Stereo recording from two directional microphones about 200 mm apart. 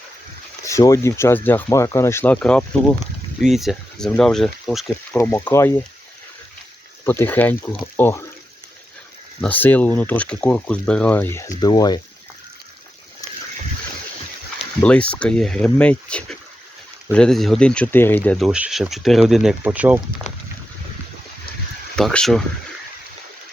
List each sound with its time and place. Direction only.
0.6 s speech: 15° left (ahead or behind)
5.1 s speech: 10° left (ahead or behind)
7.0 s speech: 10° left (ahead or behind)
9.4 s speech: 10° left (ahead or behind)
14.8 s speech: 5° left (ahead or behind)
20.3 s boat: 35° left (ahead or behind)
21.9 s speech: 5° left (ahead or behind)